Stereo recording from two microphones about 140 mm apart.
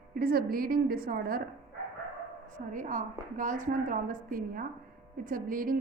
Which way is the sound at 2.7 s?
65° right (ahead or behind).